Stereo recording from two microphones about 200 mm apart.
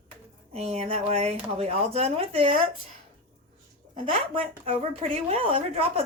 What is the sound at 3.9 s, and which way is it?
A woman's voice, 30° right (ahead or behind).